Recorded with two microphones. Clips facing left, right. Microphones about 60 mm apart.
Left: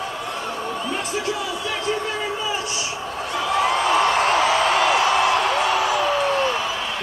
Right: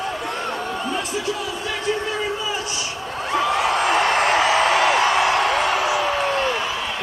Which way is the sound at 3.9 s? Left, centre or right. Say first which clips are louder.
Even; right.